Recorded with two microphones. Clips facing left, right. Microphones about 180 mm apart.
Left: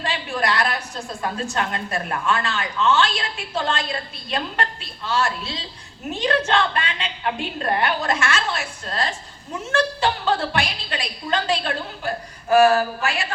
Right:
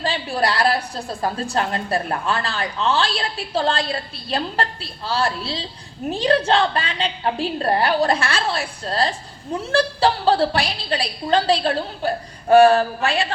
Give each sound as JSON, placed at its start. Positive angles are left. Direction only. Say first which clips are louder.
{"t": 0.0, "sound": "a woman's voice", "louder": "right 3 dB", "side_deg": -35}